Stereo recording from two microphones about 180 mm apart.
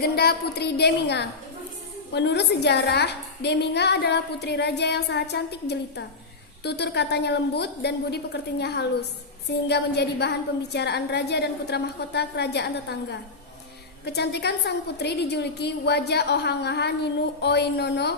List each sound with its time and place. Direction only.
0.0 s a woman's voice: 60° left (ahead or behind)